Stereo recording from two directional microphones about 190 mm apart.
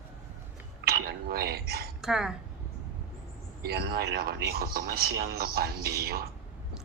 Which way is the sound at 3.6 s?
55° right (ahead or behind).